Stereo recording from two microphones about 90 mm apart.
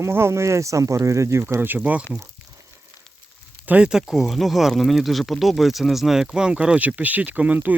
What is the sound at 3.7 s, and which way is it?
Speech, 10° right (ahead or behind).